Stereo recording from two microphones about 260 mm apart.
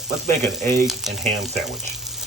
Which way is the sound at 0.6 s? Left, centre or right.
Centre.